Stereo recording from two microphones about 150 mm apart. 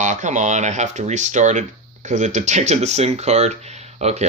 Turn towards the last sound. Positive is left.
turn(degrees=-45)  # may be behind; listen again after turning